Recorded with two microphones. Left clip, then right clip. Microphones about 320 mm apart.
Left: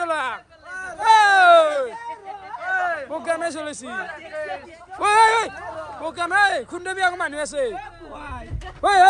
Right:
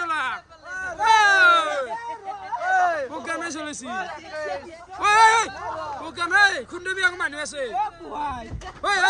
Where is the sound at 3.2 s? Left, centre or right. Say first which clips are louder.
Left 5 dB; centre.